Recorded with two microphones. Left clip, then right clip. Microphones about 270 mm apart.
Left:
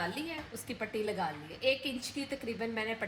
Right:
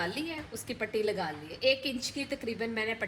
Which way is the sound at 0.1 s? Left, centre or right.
Right.